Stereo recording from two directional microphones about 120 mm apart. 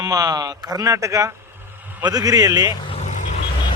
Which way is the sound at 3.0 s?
80° left.